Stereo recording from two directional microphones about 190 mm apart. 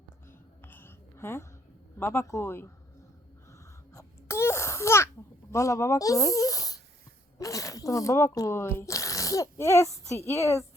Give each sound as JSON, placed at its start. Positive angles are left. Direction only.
{"t": 0.3, "sound": "a sound", "side_deg": 10}
{"t": 2.0, "sound": "a man's voice", "side_deg": 15}
{"t": 3.9, "sound": "babbling", "side_deg": 15}
{"t": 5.5, "sound": "speech", "side_deg": 15}